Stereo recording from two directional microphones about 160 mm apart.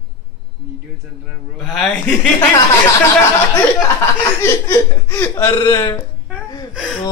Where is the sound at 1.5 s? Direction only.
5° left (ahead or behind).